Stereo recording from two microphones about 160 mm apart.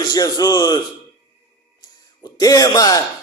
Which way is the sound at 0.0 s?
25° left (ahead or behind).